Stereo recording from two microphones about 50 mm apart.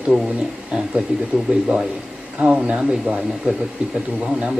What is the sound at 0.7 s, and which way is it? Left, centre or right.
Speech, centre.